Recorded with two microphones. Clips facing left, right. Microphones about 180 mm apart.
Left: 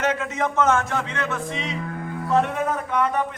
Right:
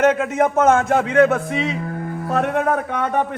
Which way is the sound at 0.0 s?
55° right (ahead or behind).